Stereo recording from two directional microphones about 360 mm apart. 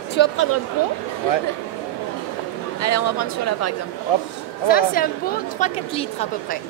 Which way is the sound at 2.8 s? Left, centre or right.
Left.